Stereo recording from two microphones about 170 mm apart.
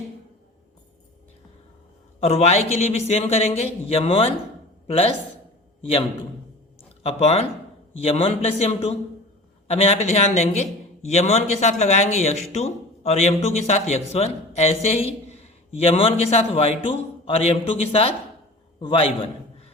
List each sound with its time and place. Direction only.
2.2 s a man's voice: 40° left (ahead or behind)